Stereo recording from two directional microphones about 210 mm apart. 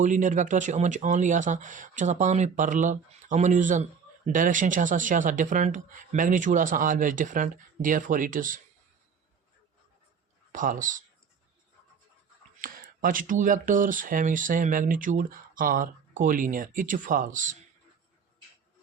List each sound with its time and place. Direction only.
0.0 s speech: 35° right (ahead or behind)
10.5 s speech: 40° right (ahead or behind)
12.6 s speech: 40° right (ahead or behind)